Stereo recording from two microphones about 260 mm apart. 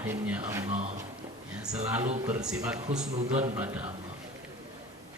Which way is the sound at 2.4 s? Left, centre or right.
Centre.